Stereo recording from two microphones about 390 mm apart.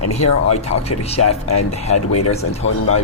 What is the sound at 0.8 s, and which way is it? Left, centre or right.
Speech, centre.